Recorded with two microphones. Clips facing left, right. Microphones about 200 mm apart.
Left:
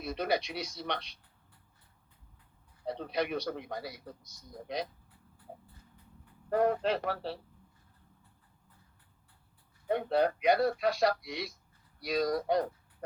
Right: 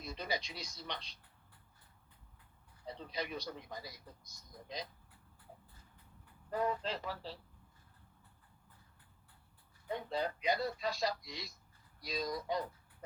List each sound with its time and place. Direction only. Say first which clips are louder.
0.0 s speech: left 9 dB; 65° left (ahead or behind)
2.8 s speech: left 9 dB; 65° left (ahead or behind)
6.5 s speech: left 8 dB; 65° left (ahead or behind)
9.9 s speech: left 10 dB; 65° left (ahead or behind)